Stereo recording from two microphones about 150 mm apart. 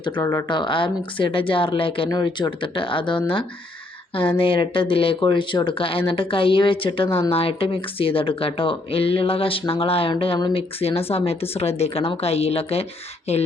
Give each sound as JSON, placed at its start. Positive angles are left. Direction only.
{"t": 0.0, "sound": "speech", "side_deg": 20}
{"t": 0.4, "sound": "speech", "side_deg": 30}